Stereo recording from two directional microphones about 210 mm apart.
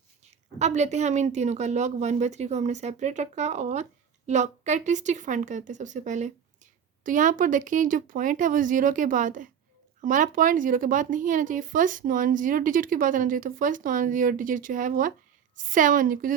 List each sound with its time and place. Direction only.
0.3 s speech: 35° right (ahead or behind)